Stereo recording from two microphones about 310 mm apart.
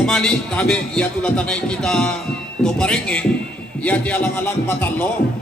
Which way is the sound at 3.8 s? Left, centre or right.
Centre.